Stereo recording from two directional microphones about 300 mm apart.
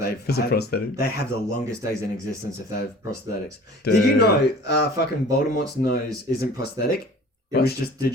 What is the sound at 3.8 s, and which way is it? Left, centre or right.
Speech, left.